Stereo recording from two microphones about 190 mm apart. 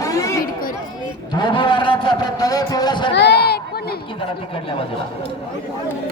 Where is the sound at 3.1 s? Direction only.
60° left (ahead or behind).